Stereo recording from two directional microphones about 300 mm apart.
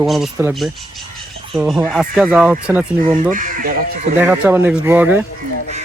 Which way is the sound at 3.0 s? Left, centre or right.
Right.